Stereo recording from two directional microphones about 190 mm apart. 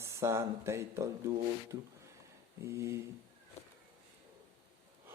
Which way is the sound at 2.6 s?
15° right (ahead or behind).